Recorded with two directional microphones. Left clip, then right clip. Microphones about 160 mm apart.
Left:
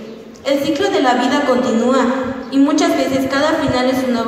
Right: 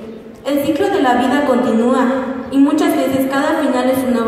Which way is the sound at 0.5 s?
30° left (ahead or behind).